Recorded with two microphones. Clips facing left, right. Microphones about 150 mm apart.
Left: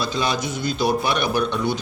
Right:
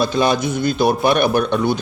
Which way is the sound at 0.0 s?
55° right (ahead or behind).